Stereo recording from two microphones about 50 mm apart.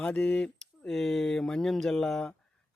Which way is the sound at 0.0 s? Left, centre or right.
Left.